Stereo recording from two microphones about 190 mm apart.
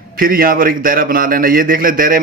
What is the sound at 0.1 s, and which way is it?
Speech, 50° right (ahead or behind).